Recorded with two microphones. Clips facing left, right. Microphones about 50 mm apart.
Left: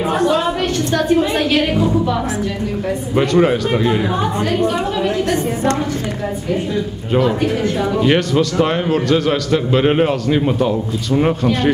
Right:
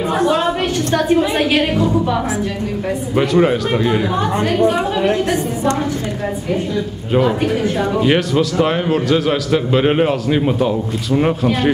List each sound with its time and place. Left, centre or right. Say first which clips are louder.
0.9 s speech: right 1 dB; centre
3.2 s a man's voice: even; centre
4.5 s speech: right 2 dB; centre
7.2 s a man's voice: right 1 dB; centre